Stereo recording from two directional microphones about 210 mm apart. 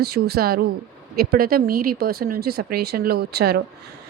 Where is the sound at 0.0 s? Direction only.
50° right (ahead or behind).